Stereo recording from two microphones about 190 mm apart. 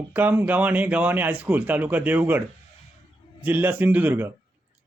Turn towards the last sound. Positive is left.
turn(degrees=-10)  # may be behind; listen again after turning